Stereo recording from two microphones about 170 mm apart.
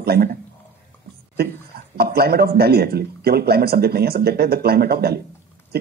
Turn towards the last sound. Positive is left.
turn(degrees=-65)  # may be behind; listen again after turning